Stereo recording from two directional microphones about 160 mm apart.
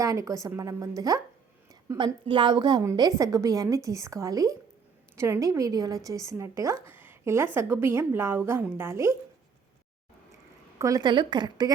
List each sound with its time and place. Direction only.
0.0 s a woman's voice: 20° right (ahead or behind)
2.2 s a woman's voice: 30° right (ahead or behind)
10.8 s a woman's voice: 20° right (ahead or behind)